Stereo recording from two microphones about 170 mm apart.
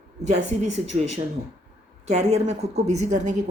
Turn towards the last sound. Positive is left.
turn(degrees=-45)  # may be behind; listen again after turning